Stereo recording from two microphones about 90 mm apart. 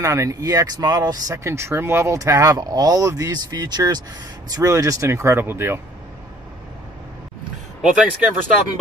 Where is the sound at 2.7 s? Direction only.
45° right (ahead or behind).